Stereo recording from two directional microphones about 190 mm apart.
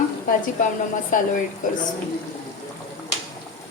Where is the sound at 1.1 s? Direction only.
45° left (ahead or behind).